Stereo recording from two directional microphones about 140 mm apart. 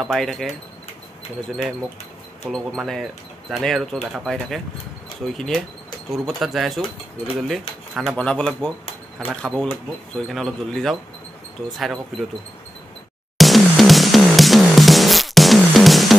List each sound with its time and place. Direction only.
0.0 s speech: centre (ahead or behind)
2.5 s speech: centre (ahead or behind)
6.1 s speech: centre (ahead or behind)
13.4 s music: centre (ahead or behind)